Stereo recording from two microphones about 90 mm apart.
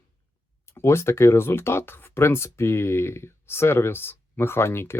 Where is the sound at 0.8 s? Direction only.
30° left (ahead or behind).